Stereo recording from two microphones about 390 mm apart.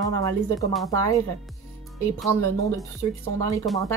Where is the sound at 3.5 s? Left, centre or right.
Centre.